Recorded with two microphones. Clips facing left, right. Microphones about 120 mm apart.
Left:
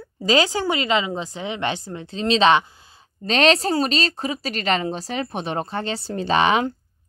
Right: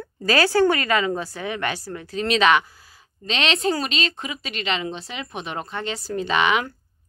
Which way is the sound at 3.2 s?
40° left (ahead or behind).